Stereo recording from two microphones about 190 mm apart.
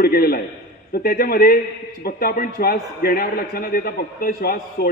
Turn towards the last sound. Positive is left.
turn(degrees=50)  # may be behind; listen again after turning